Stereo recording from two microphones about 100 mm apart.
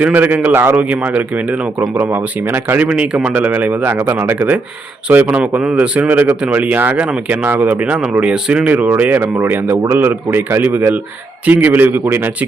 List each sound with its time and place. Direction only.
0.0 s speech: 15° right (ahead or behind)